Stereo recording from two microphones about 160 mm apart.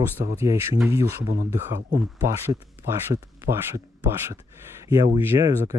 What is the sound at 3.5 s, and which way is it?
Speech, 60° right (ahead or behind).